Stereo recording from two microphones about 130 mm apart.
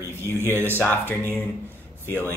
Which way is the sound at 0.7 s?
15° left (ahead or behind).